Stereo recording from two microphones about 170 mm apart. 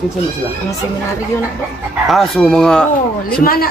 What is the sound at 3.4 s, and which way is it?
Speech, 60° left (ahead or behind).